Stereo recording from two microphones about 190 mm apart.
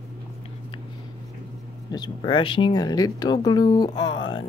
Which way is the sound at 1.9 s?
25° left (ahead or behind).